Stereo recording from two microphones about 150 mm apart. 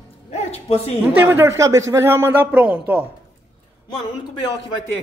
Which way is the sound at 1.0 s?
15° right (ahead or behind).